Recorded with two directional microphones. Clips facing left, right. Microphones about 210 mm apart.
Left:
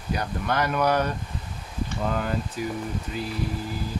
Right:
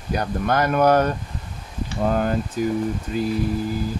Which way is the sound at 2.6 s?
45° right (ahead or behind).